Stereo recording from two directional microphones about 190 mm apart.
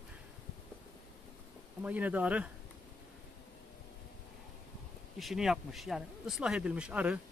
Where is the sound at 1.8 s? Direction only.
10° right (ahead or behind).